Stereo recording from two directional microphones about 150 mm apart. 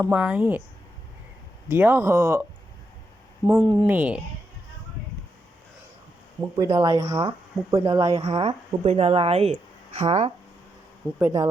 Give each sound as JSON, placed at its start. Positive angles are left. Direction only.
{"t": 0.0, "sound": "speech", "side_deg": -10}
{"t": 1.6, "sound": "speech", "side_deg": -15}
{"t": 3.4, "sound": "speech", "side_deg": -30}
{"t": 3.8, "sound": "speech", "side_deg": -10}
{"t": 6.6, "sound": "speech", "side_deg": -20}
{"t": 7.0, "sound": "speech", "side_deg": -35}
{"t": 7.3, "sound": "speech", "side_deg": -25}
{"t": 8.1, "sound": "speech", "side_deg": -35}
{"t": 11.2, "sound": "speech", "side_deg": -15}